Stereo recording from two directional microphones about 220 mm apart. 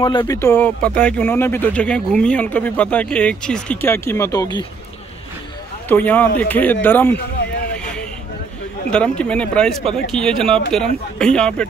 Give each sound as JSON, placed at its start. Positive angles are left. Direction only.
{"t": 0.0, "sound": "speech", "side_deg": 20}
{"t": 0.4, "sound": "speech", "side_deg": 10}
{"t": 5.9, "sound": "speech", "side_deg": 10}
{"t": 8.9, "sound": "speech", "side_deg": 5}